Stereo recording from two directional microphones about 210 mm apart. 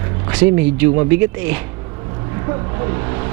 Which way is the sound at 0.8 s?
10° right (ahead or behind).